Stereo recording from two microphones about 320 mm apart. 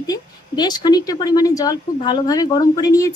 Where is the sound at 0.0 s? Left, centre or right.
Centre.